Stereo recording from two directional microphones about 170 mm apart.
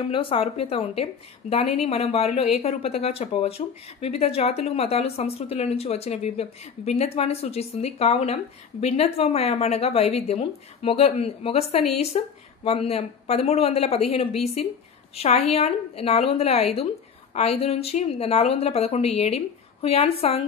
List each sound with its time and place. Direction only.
0.1 s a woman's voice: 30° left (ahead or behind)